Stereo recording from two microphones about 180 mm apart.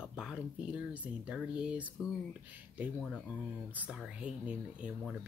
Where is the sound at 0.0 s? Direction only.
5° right (ahead or behind).